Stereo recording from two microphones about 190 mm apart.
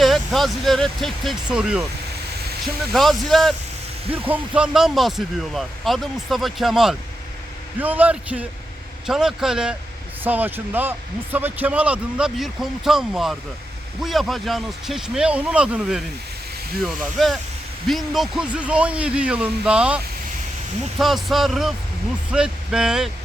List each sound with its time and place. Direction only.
0.0 s speech: centre (ahead or behind)
2.9 s speech: centre (ahead or behind)
21.0 s speech: centre (ahead or behind)